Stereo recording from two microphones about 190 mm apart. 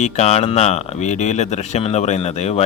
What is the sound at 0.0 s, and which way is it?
Speech, 35° left (ahead or behind).